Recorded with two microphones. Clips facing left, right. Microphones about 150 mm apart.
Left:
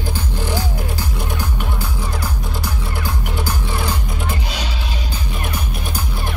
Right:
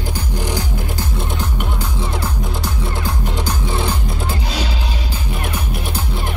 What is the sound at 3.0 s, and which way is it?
Music, 20° right (ahead or behind).